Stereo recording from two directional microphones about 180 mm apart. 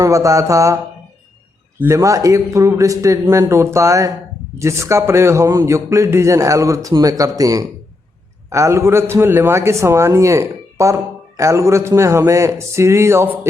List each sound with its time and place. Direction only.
0.0 s a man's voice: 20° right (ahead or behind)
1.8 s a man's voice: 15° right (ahead or behind)